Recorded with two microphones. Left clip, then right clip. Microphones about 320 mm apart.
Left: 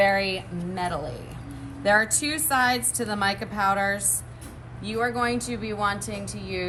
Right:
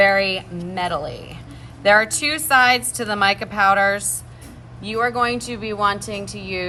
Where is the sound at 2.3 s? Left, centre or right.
Centre.